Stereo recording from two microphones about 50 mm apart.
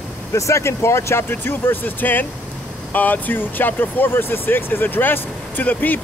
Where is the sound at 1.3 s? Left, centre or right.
Left.